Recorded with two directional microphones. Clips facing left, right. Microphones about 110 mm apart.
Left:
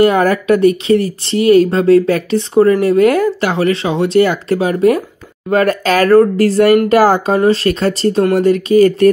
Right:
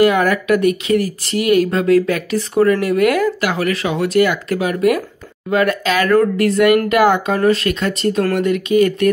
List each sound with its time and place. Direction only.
0.0 s speech: 35° left (ahead or behind)
5.5 s speech: 40° left (ahead or behind)